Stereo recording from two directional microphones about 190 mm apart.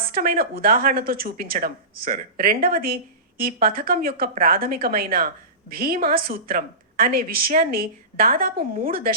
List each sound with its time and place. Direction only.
0.1 s speech: 50° right (ahead or behind)